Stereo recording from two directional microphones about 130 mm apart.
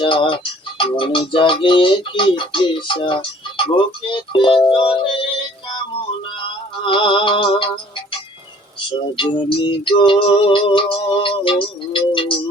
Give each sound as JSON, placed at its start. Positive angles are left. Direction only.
{"t": 0.0, "sound": "music", "side_deg": 40}
{"t": 6.8, "sound": "music", "side_deg": 40}
{"t": 8.9, "sound": "music", "side_deg": 40}